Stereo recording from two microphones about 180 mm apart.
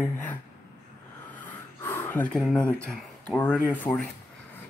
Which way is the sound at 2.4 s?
Centre (ahead or behind).